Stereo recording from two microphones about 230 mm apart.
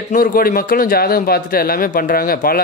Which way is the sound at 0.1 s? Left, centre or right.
Left.